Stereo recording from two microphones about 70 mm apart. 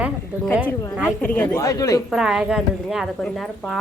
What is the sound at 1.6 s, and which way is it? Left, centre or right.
Speech, left.